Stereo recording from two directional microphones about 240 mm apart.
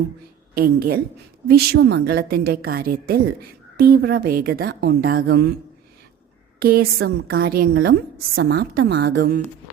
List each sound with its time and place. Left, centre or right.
0.5 s a woman's voice: right
6.6 s a woman's voice: right